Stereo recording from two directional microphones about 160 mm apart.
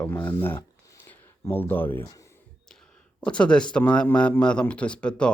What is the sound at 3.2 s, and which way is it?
A man's voice, 5° left (ahead or behind).